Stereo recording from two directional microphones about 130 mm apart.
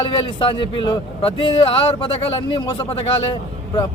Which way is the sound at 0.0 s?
40° left (ahead or behind).